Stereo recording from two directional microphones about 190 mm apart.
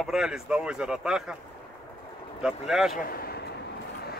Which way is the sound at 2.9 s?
50° left (ahead or behind).